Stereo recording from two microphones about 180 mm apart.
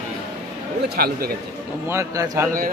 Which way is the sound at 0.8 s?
65° right (ahead or behind).